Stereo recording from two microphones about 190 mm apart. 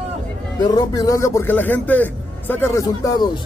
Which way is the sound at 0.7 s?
20° left (ahead or behind).